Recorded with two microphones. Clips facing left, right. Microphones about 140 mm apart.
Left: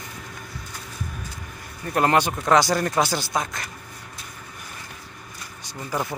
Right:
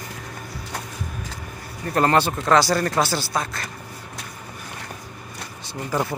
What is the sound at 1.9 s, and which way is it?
Speech, 10° left (ahead or behind).